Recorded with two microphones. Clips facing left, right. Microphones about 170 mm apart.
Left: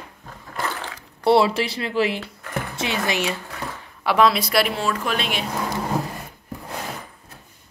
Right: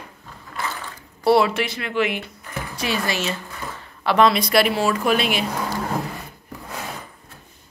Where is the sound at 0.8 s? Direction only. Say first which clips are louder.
Left 2 dB; 80° left.